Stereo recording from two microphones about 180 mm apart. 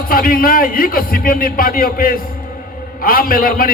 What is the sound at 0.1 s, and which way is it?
A man's voice, 55° left (ahead or behind).